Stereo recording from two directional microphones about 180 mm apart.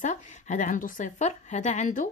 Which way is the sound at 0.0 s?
45° left (ahead or behind).